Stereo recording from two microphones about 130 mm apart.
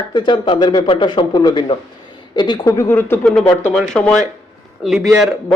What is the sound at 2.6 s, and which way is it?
A man's voice, 20° left (ahead or behind).